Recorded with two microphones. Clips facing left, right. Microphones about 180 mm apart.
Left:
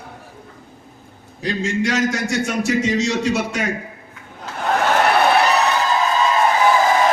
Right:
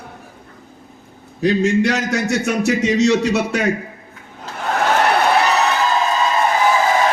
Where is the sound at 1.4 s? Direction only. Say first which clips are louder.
Right 6 dB; 65° right (ahead or behind).